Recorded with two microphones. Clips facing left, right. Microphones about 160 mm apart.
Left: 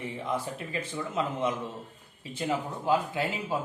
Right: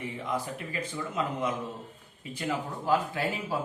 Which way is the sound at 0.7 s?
25° left (ahead or behind).